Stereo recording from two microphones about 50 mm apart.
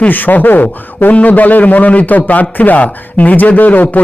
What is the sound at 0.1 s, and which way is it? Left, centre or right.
A man's voice, left.